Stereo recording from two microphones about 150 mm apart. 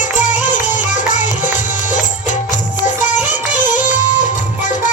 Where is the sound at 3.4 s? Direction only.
10° right (ahead or behind).